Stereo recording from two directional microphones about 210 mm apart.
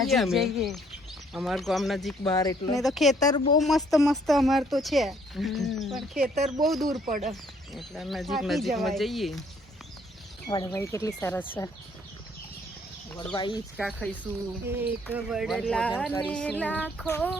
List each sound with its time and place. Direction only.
0.0 s speech: centre (ahead or behind)
2.3 s speech: 15° left (ahead or behind)
2.7 s speech: centre (ahead or behind)
3.2 s speech: 20° left (ahead or behind)
3.6 s speech: centre (ahead or behind)
10.5 s speech: 20° left (ahead or behind)
13.3 s speech: 20° left (ahead or behind)
13.7 s speech: centre (ahead or behind)
14.7 s speech: 10° right (ahead or behind); by 17.3 s 5° left (ahead or behind)